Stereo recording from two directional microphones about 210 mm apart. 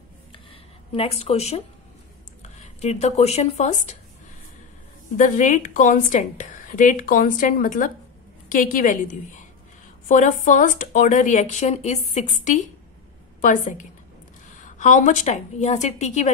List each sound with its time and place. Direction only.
0.3 s a sound: 25° left (ahead or behind)
2.4 s speech: 30° left (ahead or behind)
5.1 s a woman's voice: 35° left (ahead or behind)
10.0 s a woman's voice: 35° left (ahead or behind)